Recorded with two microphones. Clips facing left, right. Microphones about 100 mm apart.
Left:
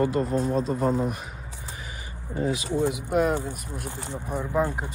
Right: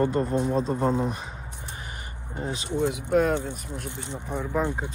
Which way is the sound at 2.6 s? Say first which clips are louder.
Left 1 dB; 15° left (ahead or behind).